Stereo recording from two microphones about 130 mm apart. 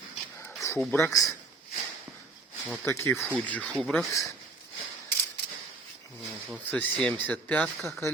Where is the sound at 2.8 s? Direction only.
20° left (ahead or behind).